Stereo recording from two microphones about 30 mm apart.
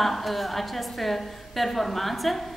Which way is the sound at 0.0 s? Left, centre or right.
Centre.